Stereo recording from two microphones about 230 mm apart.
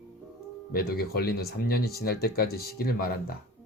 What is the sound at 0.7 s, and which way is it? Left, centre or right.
Speech, left.